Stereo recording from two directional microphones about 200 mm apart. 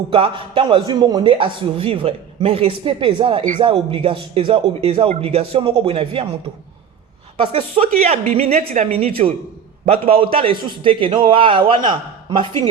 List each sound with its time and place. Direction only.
0.1 s a man's voice: 25° right (ahead or behind)
7.8 s a man's voice: 30° right (ahead or behind)